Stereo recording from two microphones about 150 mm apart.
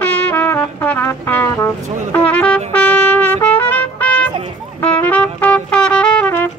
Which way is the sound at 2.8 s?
10° left (ahead or behind).